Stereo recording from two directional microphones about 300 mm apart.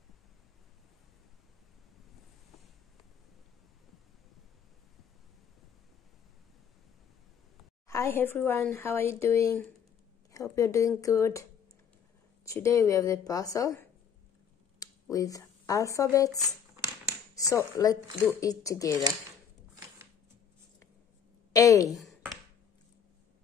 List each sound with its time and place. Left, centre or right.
7.9 s a woman's voice: centre
12.4 s a woman's voice: centre
16.3 s a sound: centre
17.4 s a woman's voice: centre
21.5 s a woman's voice: centre
21.9 s a sound: centre